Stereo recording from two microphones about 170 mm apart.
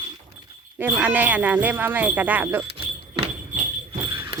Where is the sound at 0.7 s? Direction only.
10° right (ahead or behind).